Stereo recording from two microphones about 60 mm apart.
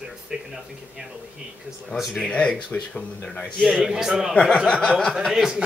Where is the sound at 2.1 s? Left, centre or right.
Centre.